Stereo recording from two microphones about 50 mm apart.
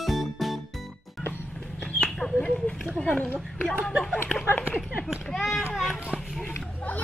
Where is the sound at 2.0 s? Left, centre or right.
Centre.